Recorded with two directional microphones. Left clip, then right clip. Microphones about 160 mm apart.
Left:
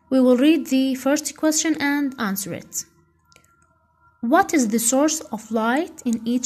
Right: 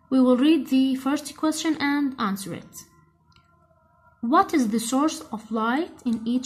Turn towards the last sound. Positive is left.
turn(degrees=25)  # may be behind; listen again after turning